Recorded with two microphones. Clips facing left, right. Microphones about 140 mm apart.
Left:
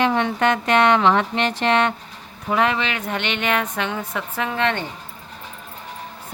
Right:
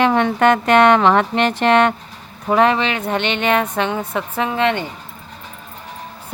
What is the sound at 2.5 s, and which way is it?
A woman's voice, 35° right (ahead or behind).